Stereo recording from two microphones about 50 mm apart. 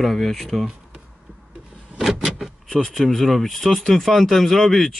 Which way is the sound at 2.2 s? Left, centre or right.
Centre.